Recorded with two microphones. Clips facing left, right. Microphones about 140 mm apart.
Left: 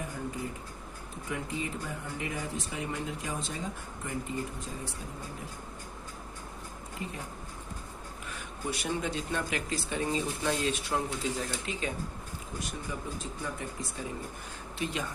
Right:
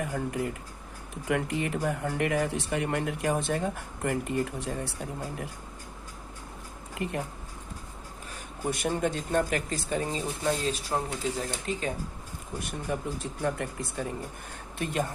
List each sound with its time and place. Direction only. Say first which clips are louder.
0.1 s speech: right 6 dB; 70° right (ahead or behind)
8.3 s speech: right 4 dB; 45° right (ahead or behind)
12.5 s speech: right 6 dB; 60° right (ahead or behind)